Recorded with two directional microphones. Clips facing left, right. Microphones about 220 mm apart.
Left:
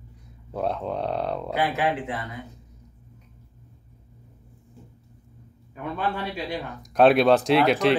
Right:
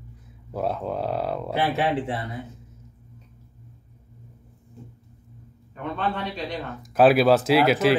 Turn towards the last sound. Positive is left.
turn(degrees=-5)  # may be behind; listen again after turning